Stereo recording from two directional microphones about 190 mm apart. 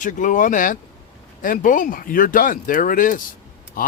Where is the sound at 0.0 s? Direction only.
40° left (ahead or behind).